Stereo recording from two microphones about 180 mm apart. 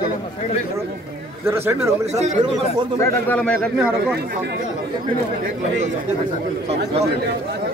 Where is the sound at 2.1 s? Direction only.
40° right (ahead or behind).